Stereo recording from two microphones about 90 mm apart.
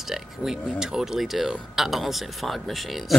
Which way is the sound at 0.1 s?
5° right (ahead or behind).